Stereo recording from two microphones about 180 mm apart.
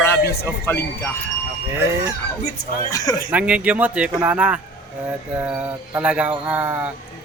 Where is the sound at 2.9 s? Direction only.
20° left (ahead or behind).